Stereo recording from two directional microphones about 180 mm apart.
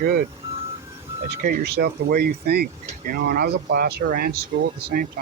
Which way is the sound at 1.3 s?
55° right (ahead or behind).